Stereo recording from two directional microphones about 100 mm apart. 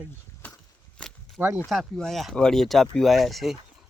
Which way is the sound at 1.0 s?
5° left (ahead or behind).